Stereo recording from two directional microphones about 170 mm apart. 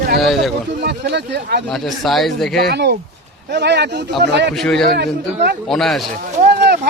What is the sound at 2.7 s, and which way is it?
Speech, 85° right.